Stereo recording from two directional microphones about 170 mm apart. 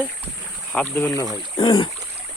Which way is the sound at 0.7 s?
10° left (ahead or behind).